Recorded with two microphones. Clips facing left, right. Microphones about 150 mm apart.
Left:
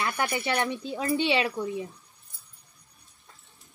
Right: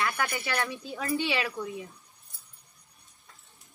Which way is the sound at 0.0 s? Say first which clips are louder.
Left 2 dB; 25° left (ahead or behind).